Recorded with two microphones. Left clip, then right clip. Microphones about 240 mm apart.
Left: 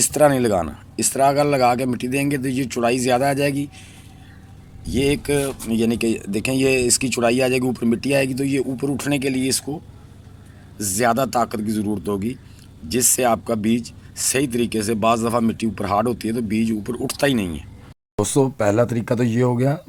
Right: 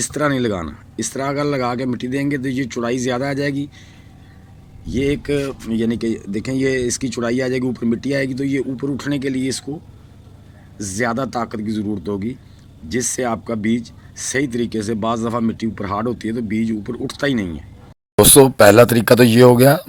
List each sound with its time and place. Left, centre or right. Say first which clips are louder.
0.0 s speech: left 3 dB; centre
4.9 s speech: even; centre
10.8 s speech: left 2 dB; centre
18.2 s speech: right 10 dB; centre